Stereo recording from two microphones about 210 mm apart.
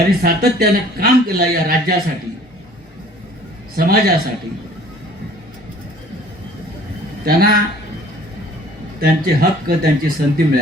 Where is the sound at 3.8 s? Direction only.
45° right (ahead or behind).